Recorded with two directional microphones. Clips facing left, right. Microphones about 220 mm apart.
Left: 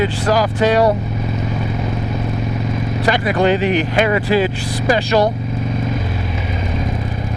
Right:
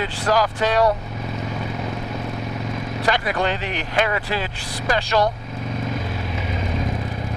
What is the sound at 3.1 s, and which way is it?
Speech, 10° left (ahead or behind).